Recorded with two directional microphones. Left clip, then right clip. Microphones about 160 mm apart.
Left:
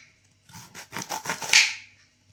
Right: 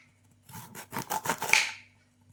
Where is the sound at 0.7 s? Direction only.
20° right (ahead or behind).